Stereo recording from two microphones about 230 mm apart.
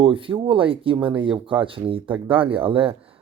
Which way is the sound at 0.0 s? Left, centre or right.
Right.